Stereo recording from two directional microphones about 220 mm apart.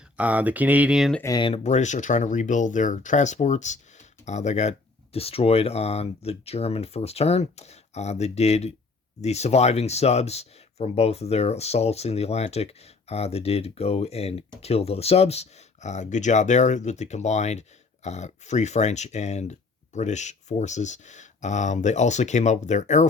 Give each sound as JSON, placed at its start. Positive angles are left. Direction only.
{"t": 0.2, "sound": "speech", "side_deg": -5}
{"t": 1.2, "sound": "speech", "side_deg": 20}